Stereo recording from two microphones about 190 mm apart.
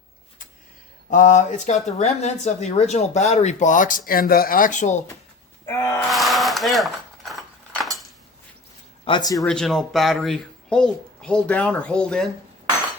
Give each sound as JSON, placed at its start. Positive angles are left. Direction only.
{"t": 1.1, "sound": "speech", "side_deg": 40}
{"t": 5.6, "sound": "gasp", "side_deg": 15}
{"t": 6.1, "sound": "a sound", "side_deg": 0}
{"t": 9.0, "sound": "a man's voice", "side_deg": 20}
{"t": 9.4, "sound": "speech", "side_deg": 0}